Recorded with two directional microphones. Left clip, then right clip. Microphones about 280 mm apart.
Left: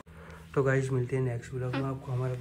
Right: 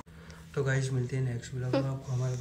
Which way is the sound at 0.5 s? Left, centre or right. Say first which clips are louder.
Left 5 dB; centre.